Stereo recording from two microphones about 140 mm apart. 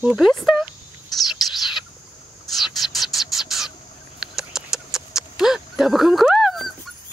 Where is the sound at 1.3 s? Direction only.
5° right (ahead or behind).